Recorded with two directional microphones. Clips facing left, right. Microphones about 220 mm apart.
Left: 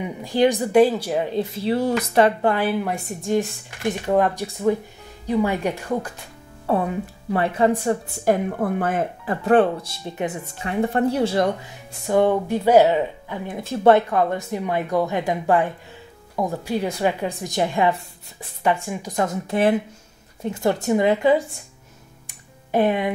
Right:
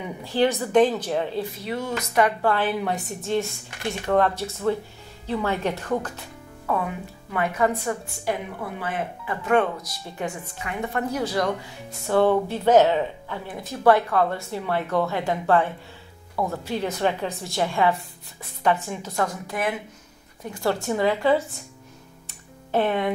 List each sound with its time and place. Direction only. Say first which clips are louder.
0.0 s speech: left 3 dB; 15° left (ahead or behind)
1.6 s speech: left 7 dB; 30° left (ahead or behind)
2.5 s speech: left 2 dB; 10° left (ahead or behind)
6.6 s speech: left 5 dB; 30° left (ahead or behind)
8.3 s speech: left 8 dB; 50° left (ahead or behind); by 11.5 s 25° left (ahead or behind)
12.1 s speech: left 1 dB; 15° left (ahead or behind)
13.5 s speech: left 3 dB; 25° left (ahead or behind)
22.7 s speech: left 3 dB; 15° left (ahead or behind)